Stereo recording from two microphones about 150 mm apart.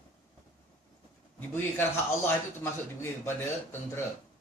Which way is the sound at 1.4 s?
15° left (ahead or behind).